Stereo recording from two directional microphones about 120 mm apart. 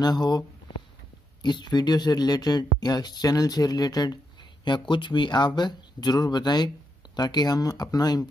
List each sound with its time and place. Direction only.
0.0 s speech: 35° left (ahead or behind)